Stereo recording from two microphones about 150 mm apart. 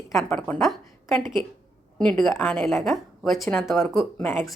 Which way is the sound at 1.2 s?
30° right (ahead or behind).